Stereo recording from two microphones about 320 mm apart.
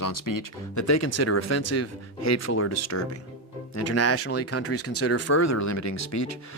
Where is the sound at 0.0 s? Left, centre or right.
Left.